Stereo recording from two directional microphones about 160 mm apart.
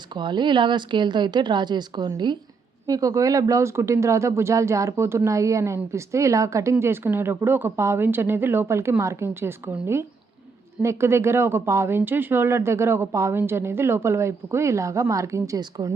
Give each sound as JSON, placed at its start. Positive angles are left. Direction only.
{"t": 0.1, "sound": "a woman's voice", "side_deg": -30}